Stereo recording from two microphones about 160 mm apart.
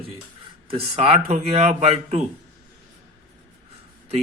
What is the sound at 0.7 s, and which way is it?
Speech, 35° right (ahead or behind).